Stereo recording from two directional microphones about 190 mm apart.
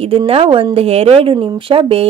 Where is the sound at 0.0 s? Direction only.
30° right (ahead or behind).